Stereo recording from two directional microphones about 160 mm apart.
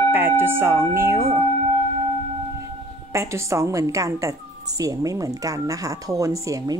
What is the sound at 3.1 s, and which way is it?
A woman's voice, 20° right (ahead or behind).